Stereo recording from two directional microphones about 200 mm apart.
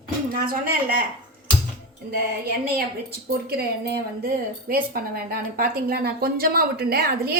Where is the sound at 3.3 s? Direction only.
55° right (ahead or behind).